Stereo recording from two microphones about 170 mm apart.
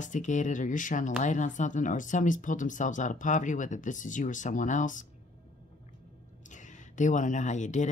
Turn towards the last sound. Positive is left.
turn(degrees=45)  # may be behind; listen again after turning